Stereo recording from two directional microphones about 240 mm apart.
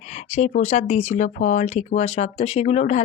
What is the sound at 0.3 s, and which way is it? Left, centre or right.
Speech, left.